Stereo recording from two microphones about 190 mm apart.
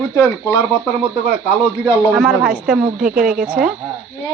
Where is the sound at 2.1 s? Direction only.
Centre (ahead or behind).